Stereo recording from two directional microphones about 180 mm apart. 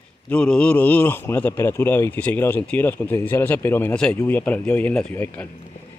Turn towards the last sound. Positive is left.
turn(degrees=10)  # may be behind; listen again after turning